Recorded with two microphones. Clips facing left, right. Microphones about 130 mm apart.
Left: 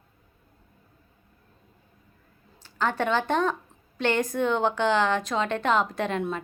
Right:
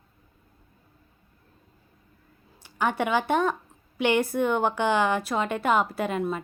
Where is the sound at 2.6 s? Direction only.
15° right (ahead or behind).